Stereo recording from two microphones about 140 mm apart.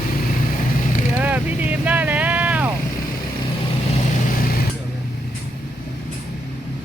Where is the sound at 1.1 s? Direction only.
10° right (ahead or behind).